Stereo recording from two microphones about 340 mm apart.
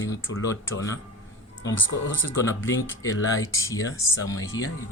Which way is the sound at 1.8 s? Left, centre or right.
Left.